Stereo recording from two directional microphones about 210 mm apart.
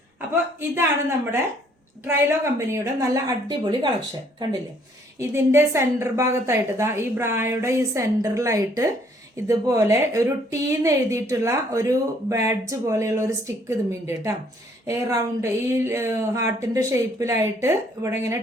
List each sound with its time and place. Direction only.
0.8 s a woman's voice: 10° right (ahead or behind)
5.2 s a woman's voice: 10° right (ahead or behind)